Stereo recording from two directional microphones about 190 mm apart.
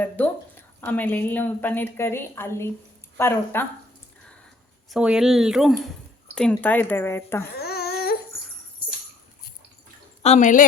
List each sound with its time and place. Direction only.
0.2 s a woman's voice: 10° left (ahead or behind)
4.9 s speech: 5° right (ahead or behind)
6.6 s a woman's voice: 10° left (ahead or behind)
7.5 s a sound: 55° left (ahead or behind)
10.2 s speech: 40° left (ahead or behind)